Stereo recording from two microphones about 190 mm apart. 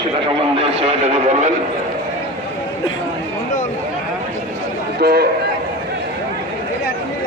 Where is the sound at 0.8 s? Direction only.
30° right (ahead or behind).